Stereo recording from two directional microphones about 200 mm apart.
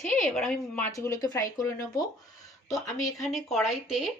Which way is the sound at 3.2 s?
Centre (ahead or behind).